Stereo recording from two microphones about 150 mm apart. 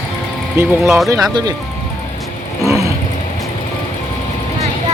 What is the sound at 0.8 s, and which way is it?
Speech, centre (ahead or behind).